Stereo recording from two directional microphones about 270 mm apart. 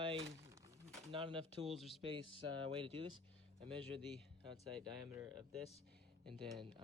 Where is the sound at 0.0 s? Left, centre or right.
Centre.